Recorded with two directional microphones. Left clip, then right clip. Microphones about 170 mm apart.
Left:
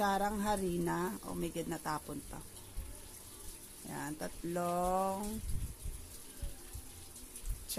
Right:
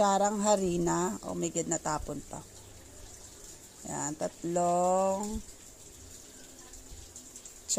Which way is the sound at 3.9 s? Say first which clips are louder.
Right 7 dB; 20° right (ahead or behind).